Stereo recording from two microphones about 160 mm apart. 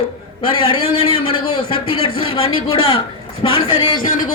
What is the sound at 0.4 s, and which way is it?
Speech, 35° left (ahead or behind).